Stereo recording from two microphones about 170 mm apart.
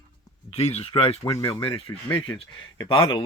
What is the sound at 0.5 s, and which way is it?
Speech, 40° left (ahead or behind).